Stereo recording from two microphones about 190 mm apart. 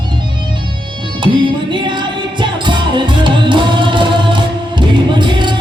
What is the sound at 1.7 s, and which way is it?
Music, 25° right (ahead or behind).